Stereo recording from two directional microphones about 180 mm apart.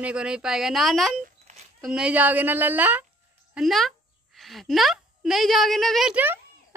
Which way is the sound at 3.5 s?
Centre (ahead or behind).